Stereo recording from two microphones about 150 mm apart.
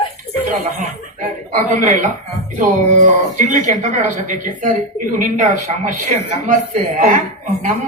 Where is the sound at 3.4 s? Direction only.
55° right (ahead or behind).